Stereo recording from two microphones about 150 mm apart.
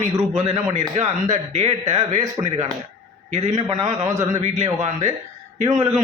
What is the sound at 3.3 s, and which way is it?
Speech, 50° right (ahead or behind).